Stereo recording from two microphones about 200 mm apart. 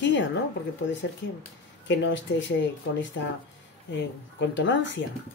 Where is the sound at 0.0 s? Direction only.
65° left (ahead or behind).